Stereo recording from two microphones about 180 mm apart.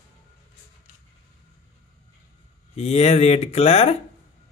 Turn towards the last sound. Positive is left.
turn(degrees=35)  # may be behind; listen again after turning